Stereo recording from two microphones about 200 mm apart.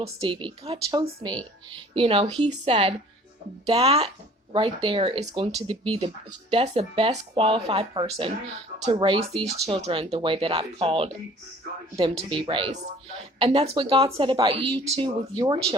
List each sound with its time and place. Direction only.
0.0 s speech: 25° right (ahead or behind)
12.3 s speech: 25° right (ahead or behind)